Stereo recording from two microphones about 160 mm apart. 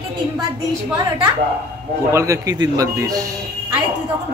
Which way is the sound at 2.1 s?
20° right (ahead or behind).